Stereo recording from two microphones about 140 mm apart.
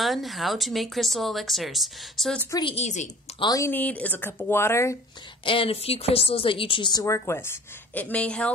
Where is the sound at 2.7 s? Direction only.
55° left (ahead or behind).